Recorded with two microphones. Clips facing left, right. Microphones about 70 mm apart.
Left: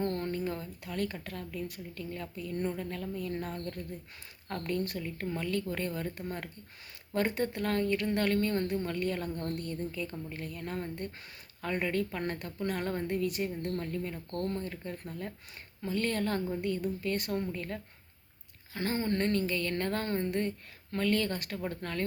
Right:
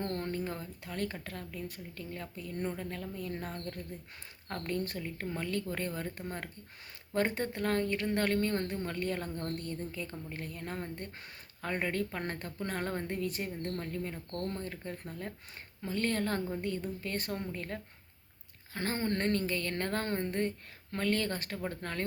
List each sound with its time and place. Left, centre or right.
0.3 s speech: right